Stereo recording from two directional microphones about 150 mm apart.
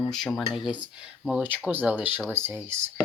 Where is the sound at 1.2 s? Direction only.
Centre (ahead or behind).